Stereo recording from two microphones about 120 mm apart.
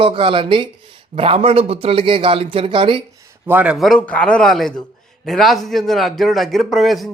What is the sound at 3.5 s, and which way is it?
Speech, 15° right (ahead or behind).